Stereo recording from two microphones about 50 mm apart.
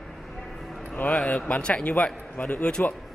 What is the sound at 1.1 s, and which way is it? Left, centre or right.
Speech, left.